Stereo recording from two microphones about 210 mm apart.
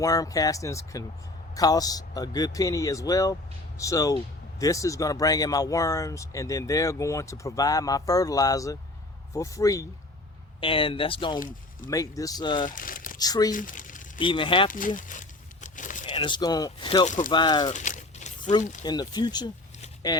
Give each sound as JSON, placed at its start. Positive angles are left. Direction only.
{"t": 0.0, "sound": "speech", "side_deg": 15}
{"t": 12.6, "sound": "speech", "side_deg": 40}
{"t": 13.1, "sound": "speech", "side_deg": 20}
{"t": 13.5, "sound": "speech", "side_deg": 40}
{"t": 14.2, "sound": "speech", "side_deg": 25}
{"t": 14.7, "sound": "crumpling", "side_deg": 40}
{"t": 16.0, "sound": "speech", "side_deg": 20}
{"t": 17.7, "sound": "a sound", "side_deg": 35}
{"t": 18.9, "sound": "speech", "side_deg": 20}